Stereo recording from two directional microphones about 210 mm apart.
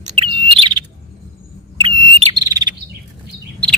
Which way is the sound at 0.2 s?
25° right (ahead or behind).